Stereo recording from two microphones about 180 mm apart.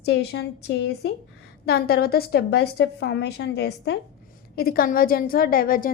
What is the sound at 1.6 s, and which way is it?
A woman's voice, 60° left (ahead or behind).